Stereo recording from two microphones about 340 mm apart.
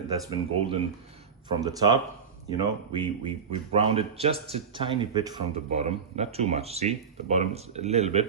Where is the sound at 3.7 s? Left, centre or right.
Centre.